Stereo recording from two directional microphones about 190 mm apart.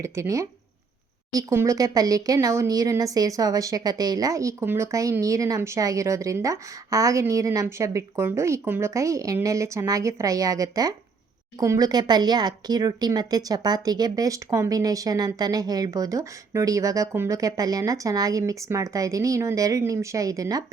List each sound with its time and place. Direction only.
0.0 s speech: 15° right (ahead or behind)